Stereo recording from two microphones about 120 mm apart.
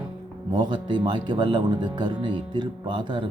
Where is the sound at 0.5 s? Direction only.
40° right (ahead or behind).